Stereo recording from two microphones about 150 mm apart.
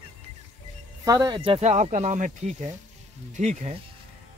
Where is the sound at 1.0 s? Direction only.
25° right (ahead or behind).